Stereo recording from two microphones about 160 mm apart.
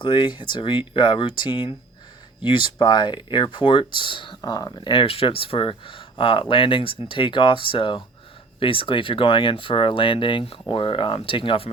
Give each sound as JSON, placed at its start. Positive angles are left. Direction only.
{"t": 0.0, "sound": "speech", "side_deg": 30}